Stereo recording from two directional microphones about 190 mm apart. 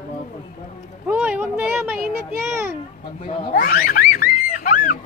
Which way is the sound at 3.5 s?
50° left (ahead or behind).